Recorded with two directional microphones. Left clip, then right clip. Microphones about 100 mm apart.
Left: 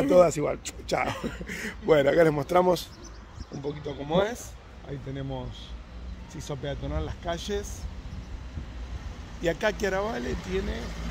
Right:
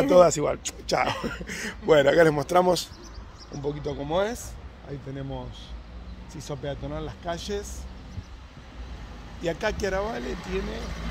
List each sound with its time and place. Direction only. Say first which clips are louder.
0.0 s speech: right 2 dB; 10° left (ahead or behind); by 7.7 s 35° left (ahead or behind)
9.4 s speech: left 1 dB; 45° left (ahead or behind)
10.3 s speech: even; 35° right (ahead or behind)